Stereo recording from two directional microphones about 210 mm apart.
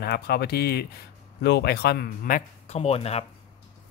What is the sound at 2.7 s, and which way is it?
Speech, 30° left (ahead or behind).